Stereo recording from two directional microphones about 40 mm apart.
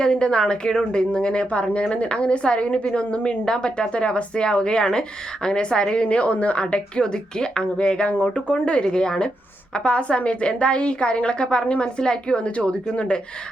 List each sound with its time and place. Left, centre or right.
0.0 s a woman's voice: left
6.0 s a woman's voice: left